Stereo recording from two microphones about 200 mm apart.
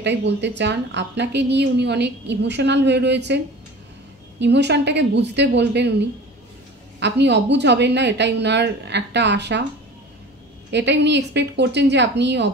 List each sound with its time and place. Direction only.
0.0 s a woman's voice: 60° right (ahead or behind)
4.4 s a woman's voice: 60° right (ahead or behind)
7.0 s a woman's voice: 60° right (ahead or behind)
10.7 s a woman's voice: 60° right (ahead or behind)